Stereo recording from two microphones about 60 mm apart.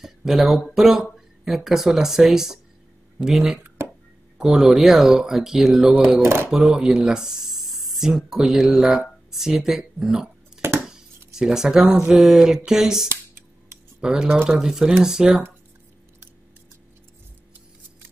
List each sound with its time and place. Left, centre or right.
0.0 s speech: centre
6.2 s speech: right
6.6 s speech: centre
10.6 s a sound: right
11.3 s speech: centre
13.1 s a sound: right
14.0 s speech: centre